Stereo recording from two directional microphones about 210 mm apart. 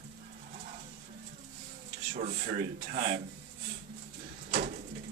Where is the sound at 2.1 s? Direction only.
35° right (ahead or behind).